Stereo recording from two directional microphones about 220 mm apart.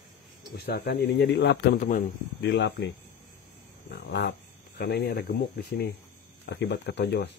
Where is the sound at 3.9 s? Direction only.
50° left (ahead or behind).